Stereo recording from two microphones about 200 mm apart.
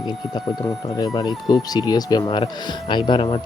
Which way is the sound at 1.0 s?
20° left (ahead or behind).